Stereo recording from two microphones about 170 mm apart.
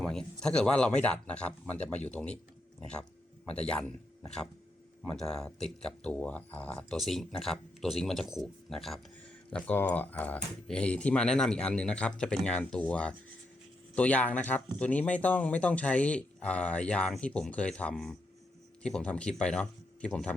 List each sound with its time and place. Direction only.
0.0 s speech: 5° left (ahead or behind)
3.4 s speech: 5° left (ahead or behind)
5.0 s speech: 5° left (ahead or behind)